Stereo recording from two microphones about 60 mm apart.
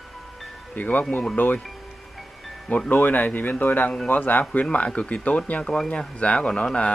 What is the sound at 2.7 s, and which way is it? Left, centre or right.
Speech, left.